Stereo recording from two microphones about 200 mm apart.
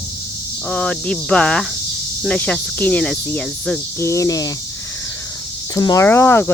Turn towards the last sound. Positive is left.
turn(degrees=10)  # may be behind; listen again after turning